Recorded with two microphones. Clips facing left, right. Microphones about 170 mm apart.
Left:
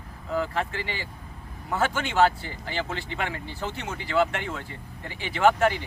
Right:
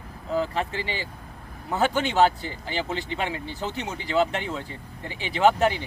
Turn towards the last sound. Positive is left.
turn(degrees=-20)  # may be behind; listen again after turning